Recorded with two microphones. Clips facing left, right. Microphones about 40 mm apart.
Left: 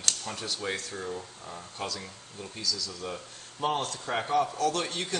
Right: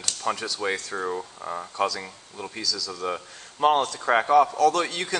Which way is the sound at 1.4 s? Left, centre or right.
Right.